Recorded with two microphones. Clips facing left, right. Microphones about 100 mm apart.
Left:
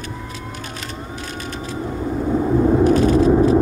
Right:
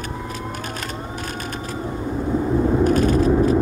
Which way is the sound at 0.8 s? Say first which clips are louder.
Right 1 dB; 45° right (ahead or behind).